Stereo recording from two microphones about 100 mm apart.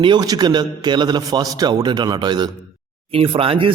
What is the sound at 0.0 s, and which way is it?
A man's voice, 45° right (ahead or behind).